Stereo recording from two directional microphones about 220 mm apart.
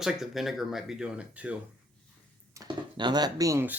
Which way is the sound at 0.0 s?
Centre (ahead or behind).